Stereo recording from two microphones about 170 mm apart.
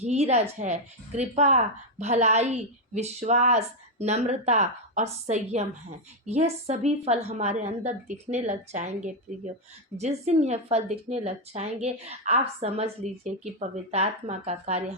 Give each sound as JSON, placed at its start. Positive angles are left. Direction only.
{"t": 0.0, "sound": "a woman's voice", "side_deg": -40}